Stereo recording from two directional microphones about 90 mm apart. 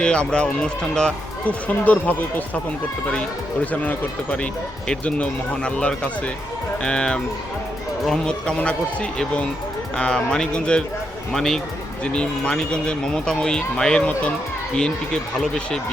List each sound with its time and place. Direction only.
0.0 s speech: 10° left (ahead or behind)